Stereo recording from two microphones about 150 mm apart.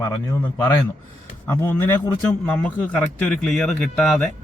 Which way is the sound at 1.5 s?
15° left (ahead or behind).